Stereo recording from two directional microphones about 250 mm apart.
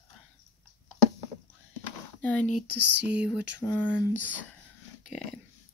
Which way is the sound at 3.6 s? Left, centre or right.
Centre.